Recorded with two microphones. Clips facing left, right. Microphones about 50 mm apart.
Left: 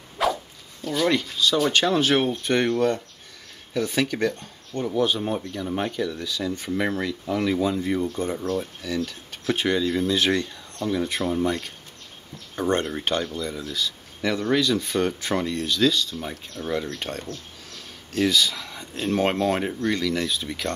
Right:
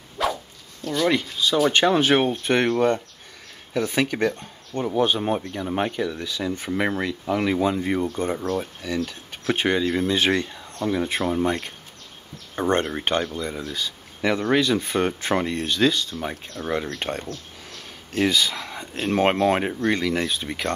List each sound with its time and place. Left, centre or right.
0.2 s zipper: centre
1.0 s speech: centre; by 8.6 s right
8.8 s speech: right